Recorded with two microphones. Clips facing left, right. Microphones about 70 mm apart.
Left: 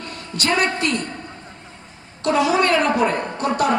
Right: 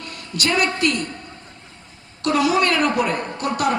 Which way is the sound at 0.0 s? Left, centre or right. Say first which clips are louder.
Even; left.